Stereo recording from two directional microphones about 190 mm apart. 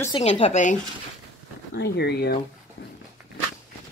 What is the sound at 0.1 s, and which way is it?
Speech, 35° left (ahead or behind).